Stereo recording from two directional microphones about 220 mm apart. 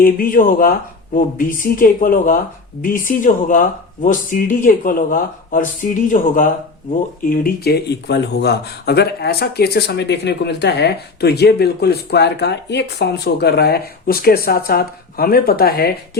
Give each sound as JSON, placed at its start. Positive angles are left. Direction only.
{"t": 0.0, "sound": "speech", "side_deg": 40}